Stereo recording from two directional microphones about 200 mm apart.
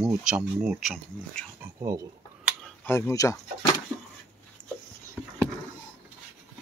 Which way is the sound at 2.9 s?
15° left (ahead or behind).